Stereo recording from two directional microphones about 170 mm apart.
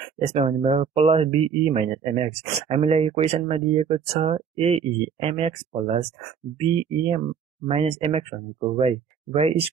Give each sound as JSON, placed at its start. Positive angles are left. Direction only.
{"t": 0.2, "sound": "speech", "side_deg": -35}